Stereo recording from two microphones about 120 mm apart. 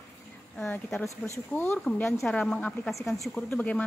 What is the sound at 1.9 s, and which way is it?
A woman's voice, 5° left (ahead or behind).